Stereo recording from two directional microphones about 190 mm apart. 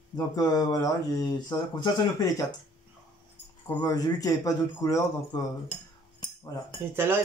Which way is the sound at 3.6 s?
20° left (ahead or behind).